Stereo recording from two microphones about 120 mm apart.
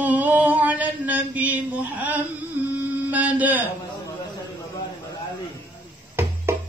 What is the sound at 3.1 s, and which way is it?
Speech, 15° right (ahead or behind).